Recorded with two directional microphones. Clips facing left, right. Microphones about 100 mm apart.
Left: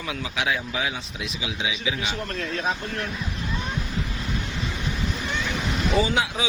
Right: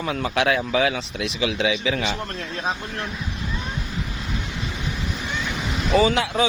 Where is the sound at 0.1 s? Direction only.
55° right (ahead or behind); by 2.1 s 70° right (ahead or behind).